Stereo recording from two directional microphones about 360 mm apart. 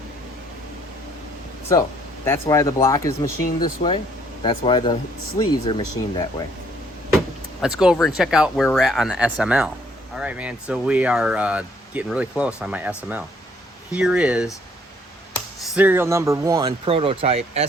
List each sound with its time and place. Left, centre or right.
2.2 s speech: centre
3.2 s speech: left
4.4 s speech: centre
7.6 s speech: centre
13.9 s speech: centre
15.6 s speech: centre